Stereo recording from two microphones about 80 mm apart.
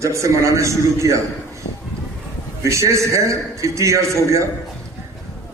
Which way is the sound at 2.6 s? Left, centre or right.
Right.